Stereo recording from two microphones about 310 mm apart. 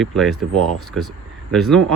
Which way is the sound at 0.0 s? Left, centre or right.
Centre.